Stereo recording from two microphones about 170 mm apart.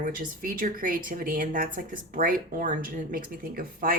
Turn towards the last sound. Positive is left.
turn(degrees=-55)  # may be behind; listen again after turning